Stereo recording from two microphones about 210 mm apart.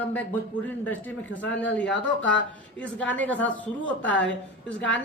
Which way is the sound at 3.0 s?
5° left (ahead or behind).